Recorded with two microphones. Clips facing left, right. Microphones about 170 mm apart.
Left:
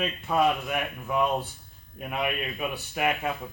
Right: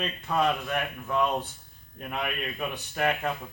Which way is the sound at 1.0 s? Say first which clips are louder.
Left 1 dB; 15° left (ahead or behind).